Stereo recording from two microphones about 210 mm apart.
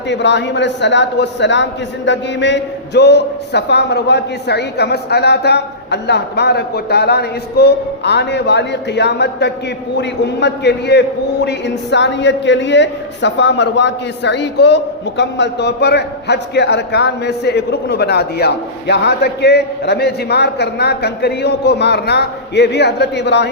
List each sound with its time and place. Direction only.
0.1 s a man's voice: 55° left (ahead or behind)